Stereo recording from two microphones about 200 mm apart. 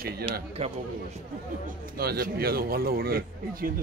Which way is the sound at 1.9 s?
50° right (ahead or behind).